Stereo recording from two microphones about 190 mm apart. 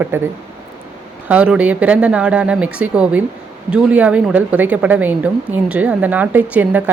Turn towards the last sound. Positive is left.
turn(degrees=-10)  # may be behind; listen again after turning